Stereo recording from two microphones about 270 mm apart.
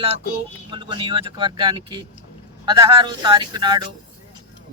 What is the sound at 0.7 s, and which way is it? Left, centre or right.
Speech, centre.